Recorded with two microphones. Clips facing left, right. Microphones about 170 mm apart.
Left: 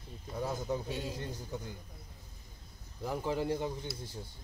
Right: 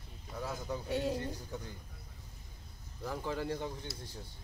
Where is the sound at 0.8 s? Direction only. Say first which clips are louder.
Right 5 dB; 60° right (ahead or behind).